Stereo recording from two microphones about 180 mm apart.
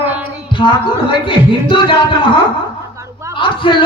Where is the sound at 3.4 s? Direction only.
30° left (ahead or behind).